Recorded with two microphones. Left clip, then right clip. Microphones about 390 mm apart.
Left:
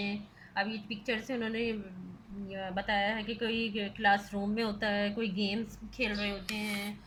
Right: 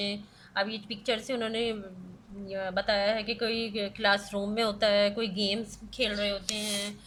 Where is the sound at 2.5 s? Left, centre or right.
Right.